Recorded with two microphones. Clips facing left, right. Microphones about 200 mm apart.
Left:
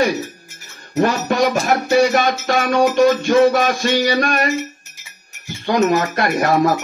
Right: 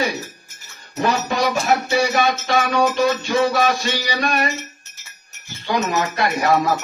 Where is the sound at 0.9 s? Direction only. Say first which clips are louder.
Left 4 dB; 50° left (ahead or behind).